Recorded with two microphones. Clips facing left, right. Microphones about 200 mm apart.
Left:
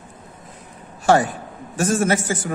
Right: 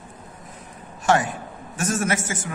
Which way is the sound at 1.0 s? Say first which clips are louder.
Left 4 dB; 35° left (ahead or behind).